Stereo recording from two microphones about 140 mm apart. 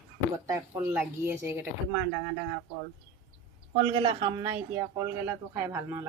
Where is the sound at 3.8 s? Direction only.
35° right (ahead or behind).